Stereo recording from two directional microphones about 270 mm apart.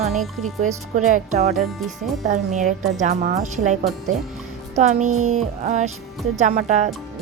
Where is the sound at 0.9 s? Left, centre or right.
Right.